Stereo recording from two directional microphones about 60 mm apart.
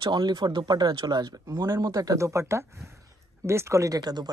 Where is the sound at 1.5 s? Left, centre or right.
Right.